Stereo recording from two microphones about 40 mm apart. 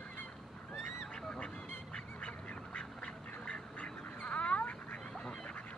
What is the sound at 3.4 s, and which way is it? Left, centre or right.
Duck, left.